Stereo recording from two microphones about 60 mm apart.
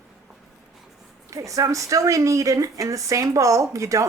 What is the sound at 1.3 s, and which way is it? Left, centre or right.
A woman's voice, right.